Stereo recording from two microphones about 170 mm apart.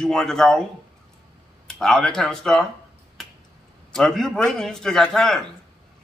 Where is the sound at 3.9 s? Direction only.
5° left (ahead or behind).